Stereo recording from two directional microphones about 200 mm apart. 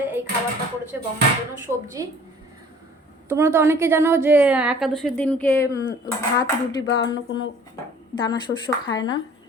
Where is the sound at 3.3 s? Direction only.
15° right (ahead or behind); by 6.9 s 20° left (ahead or behind).